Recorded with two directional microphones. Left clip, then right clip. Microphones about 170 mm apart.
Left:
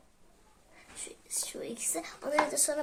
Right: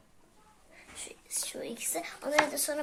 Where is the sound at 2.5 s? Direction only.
45° left (ahead or behind).